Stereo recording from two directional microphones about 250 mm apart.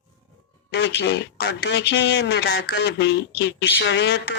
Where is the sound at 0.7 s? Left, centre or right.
Left.